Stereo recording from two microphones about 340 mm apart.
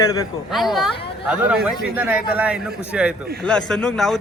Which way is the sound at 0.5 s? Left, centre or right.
Centre.